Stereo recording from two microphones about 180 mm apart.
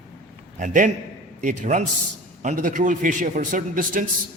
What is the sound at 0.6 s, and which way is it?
A man's voice, 45° right (ahead or behind).